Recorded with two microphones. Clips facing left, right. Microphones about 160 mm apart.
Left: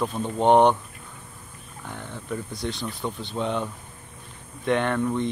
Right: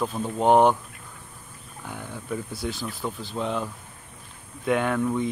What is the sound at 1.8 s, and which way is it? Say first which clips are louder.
Speech: even; 10° right (ahead or behind).